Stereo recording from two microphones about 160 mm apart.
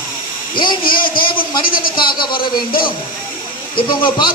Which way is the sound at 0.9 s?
65° left (ahead or behind).